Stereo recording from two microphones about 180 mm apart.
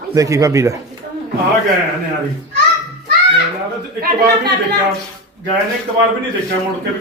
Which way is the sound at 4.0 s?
65° right (ahead or behind).